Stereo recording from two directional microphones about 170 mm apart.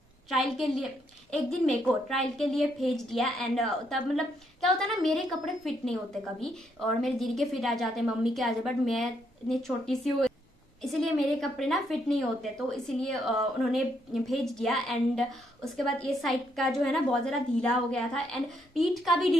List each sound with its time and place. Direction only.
0.3 s a woman's voice: centre (ahead or behind)